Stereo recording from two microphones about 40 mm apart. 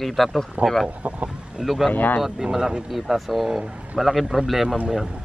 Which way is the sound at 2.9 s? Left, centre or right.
Centre.